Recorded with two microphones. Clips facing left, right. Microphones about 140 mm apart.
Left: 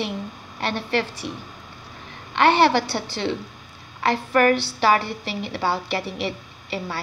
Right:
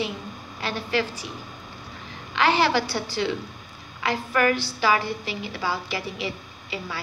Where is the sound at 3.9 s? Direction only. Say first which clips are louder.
Left 4 dB; 40° left (ahead or behind).